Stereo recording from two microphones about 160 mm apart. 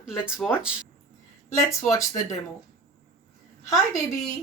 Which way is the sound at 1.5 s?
20° left (ahead or behind).